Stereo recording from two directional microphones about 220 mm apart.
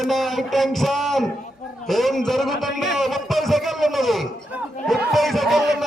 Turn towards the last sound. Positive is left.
turn(degrees=0)  # may be behind; listen again after turning